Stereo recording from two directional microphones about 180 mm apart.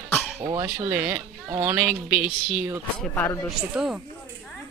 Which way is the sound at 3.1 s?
15° left (ahead or behind).